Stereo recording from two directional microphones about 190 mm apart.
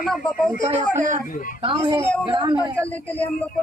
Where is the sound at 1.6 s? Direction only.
30° right (ahead or behind).